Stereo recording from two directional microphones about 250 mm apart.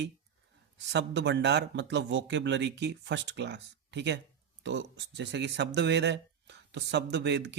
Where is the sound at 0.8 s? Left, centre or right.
Right.